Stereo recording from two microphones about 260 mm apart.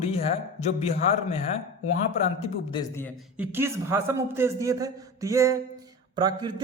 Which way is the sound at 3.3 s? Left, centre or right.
Centre.